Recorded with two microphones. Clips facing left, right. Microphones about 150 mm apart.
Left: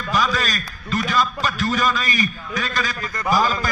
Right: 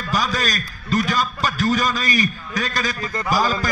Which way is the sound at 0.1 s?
40° right (ahead or behind).